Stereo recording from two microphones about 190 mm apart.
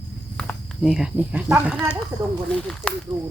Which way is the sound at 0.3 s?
5° left (ahead or behind).